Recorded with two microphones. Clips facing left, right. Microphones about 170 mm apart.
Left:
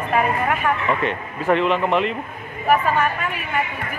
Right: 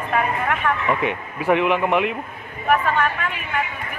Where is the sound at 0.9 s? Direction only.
10° right (ahead or behind).